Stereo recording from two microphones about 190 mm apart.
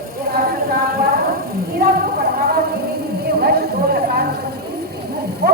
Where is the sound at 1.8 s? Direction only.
55° right (ahead or behind).